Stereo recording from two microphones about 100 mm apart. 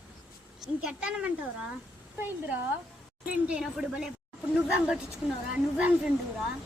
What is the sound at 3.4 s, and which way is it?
Speech, 10° right (ahead or behind).